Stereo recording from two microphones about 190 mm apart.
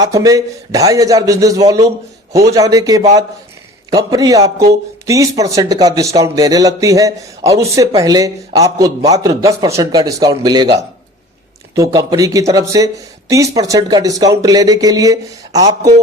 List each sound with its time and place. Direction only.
0.0 s speech: 20° right (ahead or behind)
11.7 s speech: 15° right (ahead or behind)